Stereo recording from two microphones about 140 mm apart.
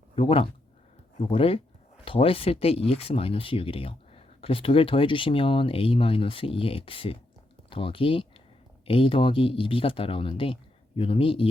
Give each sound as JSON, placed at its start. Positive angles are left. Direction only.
{"t": 0.2, "sound": "speech", "side_deg": 40}